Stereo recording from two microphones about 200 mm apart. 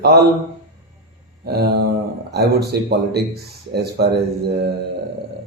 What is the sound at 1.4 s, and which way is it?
Speech, 50° right (ahead or behind).